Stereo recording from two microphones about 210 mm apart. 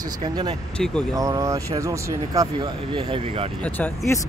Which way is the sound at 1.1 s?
15° right (ahead or behind).